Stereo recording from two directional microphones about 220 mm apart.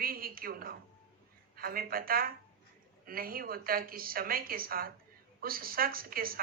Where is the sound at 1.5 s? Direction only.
40° right (ahead or behind).